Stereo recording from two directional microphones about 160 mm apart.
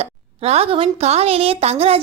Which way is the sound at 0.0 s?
40° right (ahead or behind).